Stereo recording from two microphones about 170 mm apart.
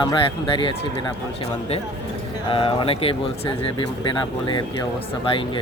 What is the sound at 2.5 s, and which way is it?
Speech, 30° left (ahead or behind).